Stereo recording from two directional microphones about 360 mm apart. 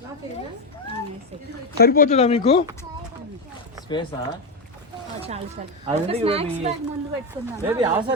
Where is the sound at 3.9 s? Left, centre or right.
Centre.